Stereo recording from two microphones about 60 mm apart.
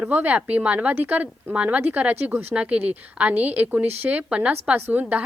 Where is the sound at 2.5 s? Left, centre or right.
Right.